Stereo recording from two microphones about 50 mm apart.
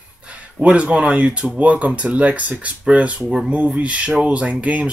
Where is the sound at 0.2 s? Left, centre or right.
Right.